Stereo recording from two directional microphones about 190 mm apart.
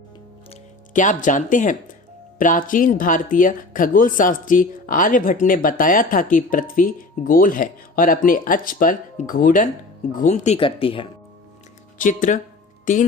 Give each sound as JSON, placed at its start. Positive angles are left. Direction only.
{"t": 0.9, "sound": "speech", "side_deg": 40}
{"t": 11.9, "sound": "speech", "side_deg": 45}